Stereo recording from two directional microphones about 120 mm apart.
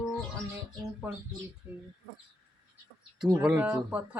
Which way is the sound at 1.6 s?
15° right (ahead or behind).